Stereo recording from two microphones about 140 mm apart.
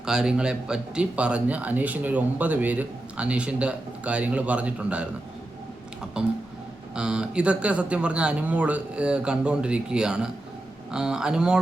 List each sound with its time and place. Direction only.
0.0 s speech: 5° right (ahead or behind)
6.2 s speech: 5° right (ahead or behind)